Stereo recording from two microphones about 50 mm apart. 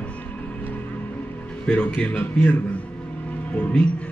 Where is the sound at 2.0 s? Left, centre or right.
Left.